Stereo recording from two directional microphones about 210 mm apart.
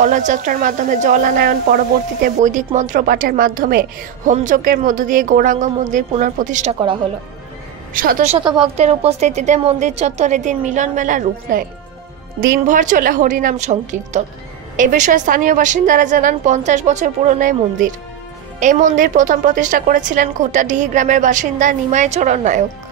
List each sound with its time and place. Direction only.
0.0 s a woman's voice: 35° right (ahead or behind)
7.9 s a woman's voice: 40° right (ahead or behind)
8.5 s a woman's voice: 25° right (ahead or behind)